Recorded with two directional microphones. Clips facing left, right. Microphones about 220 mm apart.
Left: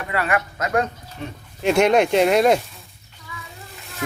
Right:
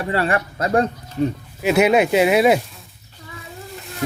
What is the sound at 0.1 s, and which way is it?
Speech, 30° right (ahead or behind).